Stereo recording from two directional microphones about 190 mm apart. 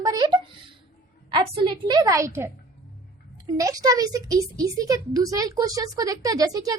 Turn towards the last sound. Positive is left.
turn(degrees=-20)  # may be behind; listen again after turning